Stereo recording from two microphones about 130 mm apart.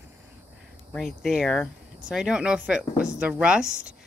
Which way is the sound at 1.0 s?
Centre (ahead or behind).